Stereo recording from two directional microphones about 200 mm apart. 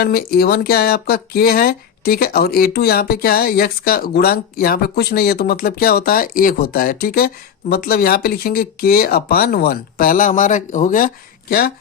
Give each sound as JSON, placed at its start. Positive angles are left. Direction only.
{"t": 0.0, "sound": "speech", "side_deg": 50}